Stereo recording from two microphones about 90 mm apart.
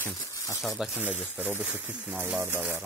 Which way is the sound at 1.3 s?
20° right (ahead or behind).